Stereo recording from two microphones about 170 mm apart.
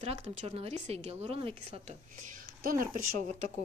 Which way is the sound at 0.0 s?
40° right (ahead or behind).